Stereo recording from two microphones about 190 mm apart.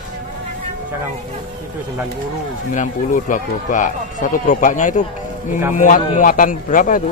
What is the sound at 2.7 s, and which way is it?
Speech, 40° left (ahead or behind).